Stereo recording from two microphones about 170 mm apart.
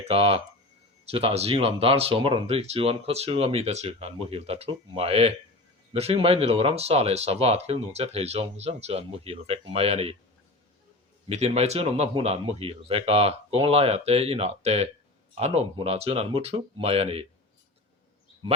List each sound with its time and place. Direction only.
0.1 s speech: 35° right (ahead or behind)
11.3 s speech: 40° right (ahead or behind)